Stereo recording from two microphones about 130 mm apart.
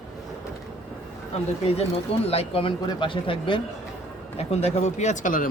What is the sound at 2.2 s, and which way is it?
A man's voice, 50° left (ahead or behind).